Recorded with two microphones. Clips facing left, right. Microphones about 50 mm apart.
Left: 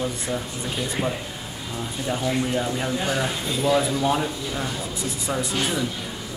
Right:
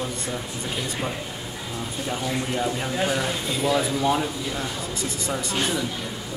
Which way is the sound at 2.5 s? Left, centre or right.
Centre.